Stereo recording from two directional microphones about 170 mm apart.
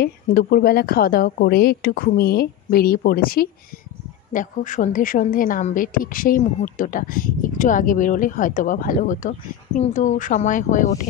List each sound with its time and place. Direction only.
0.0 s speech: 60° left (ahead or behind)
4.3 s a woman's voice: 50° left (ahead or behind)